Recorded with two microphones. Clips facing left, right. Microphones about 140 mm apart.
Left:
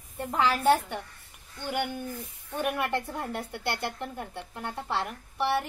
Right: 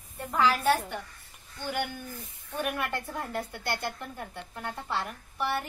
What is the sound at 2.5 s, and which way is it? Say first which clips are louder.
A woman's voice: left 3 dB; 20° left (ahead or behind).